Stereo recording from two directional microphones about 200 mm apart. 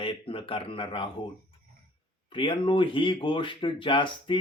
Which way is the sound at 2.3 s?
25° left (ahead or behind).